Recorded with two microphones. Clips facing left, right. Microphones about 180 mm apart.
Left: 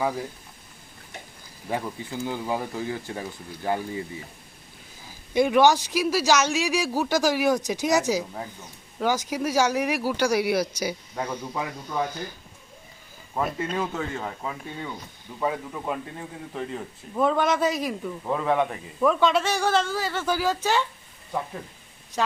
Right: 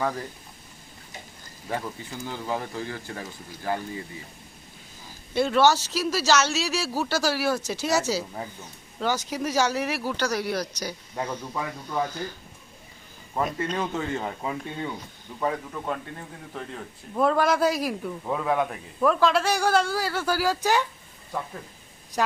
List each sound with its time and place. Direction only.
0.0 s speech: 10° left (ahead or behind)
1.6 s speech: 15° left (ahead or behind)
5.3 s speech: 15° left (ahead or behind)
13.3 s a man's voice: 5° left (ahead or behind)
13.9 s speech: 10° right (ahead or behind)
15.4 s a man's voice: 5° left (ahead or behind); by 20.8 s 15° right (ahead or behind)